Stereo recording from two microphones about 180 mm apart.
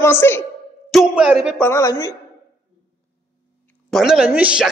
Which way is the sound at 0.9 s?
5° right (ahead or behind).